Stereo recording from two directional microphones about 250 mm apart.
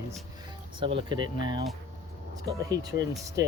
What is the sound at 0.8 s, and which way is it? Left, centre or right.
Speech, right.